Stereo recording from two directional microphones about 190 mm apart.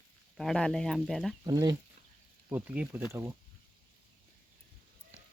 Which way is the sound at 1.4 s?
20° right (ahead or behind).